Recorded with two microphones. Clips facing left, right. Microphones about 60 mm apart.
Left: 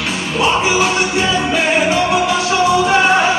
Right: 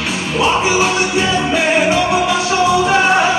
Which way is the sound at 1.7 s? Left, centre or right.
Centre.